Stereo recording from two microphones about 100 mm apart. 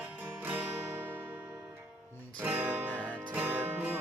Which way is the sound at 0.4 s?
15° right (ahead or behind).